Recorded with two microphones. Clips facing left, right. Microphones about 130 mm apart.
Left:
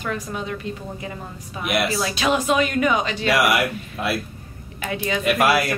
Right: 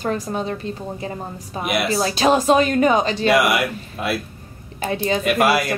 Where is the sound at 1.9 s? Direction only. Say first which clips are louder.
Right 4 dB; 35° right (ahead or behind).